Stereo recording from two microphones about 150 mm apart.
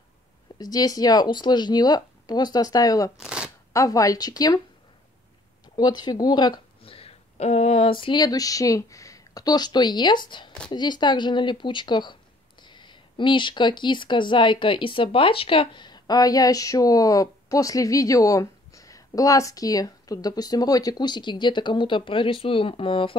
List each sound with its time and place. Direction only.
0.6 s speech: 25° left (ahead or behind)
3.2 s shuffling cards: 5° right (ahead or behind)
3.7 s speech: 20° left (ahead or behind)
5.8 s speech: 30° left (ahead or behind)